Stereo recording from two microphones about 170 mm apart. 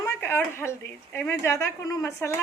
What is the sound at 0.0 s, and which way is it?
Speech, 15° left (ahead or behind).